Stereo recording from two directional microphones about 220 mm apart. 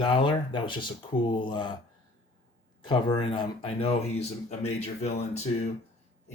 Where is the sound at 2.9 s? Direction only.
20° left (ahead or behind).